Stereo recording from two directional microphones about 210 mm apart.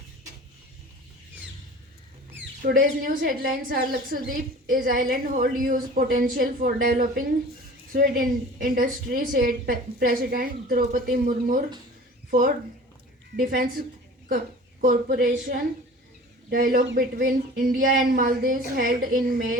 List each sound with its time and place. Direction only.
2.6 s a woman's voice: 40° right (ahead or behind)
17.2 s a woman's voice: 40° right (ahead or behind)